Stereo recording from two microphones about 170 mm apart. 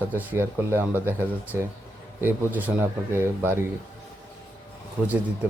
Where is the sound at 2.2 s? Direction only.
10° right (ahead or behind).